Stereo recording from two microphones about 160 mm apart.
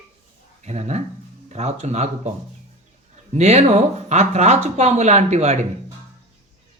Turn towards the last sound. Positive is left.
turn(degrees=-45)  # may be behind; listen again after turning